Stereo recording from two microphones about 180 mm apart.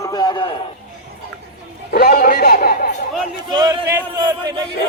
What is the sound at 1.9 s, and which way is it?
Speech, 60° left (ahead or behind).